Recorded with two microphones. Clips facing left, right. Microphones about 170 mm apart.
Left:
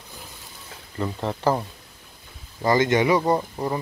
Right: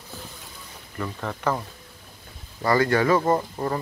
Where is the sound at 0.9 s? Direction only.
25° left (ahead or behind).